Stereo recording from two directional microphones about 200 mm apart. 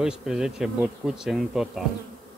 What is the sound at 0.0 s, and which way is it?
Speech, 5° right (ahead or behind).